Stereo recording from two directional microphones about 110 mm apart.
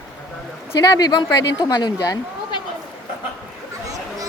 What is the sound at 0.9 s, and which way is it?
Speech, 35° left (ahead or behind).